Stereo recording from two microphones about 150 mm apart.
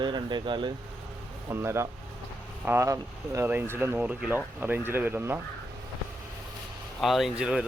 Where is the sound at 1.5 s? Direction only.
20° right (ahead or behind).